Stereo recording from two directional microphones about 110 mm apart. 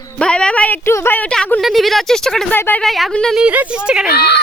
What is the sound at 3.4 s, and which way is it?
Speech, 10° right (ahead or behind).